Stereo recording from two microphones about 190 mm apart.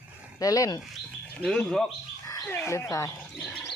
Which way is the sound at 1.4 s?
5° left (ahead or behind).